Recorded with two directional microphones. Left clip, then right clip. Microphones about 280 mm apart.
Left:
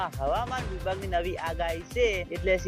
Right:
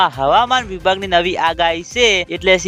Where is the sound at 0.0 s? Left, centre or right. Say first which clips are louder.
Right 16 dB; right.